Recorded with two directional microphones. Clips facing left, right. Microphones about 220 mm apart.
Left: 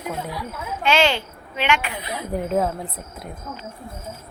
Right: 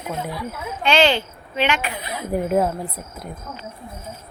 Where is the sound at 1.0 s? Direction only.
30° right (ahead or behind).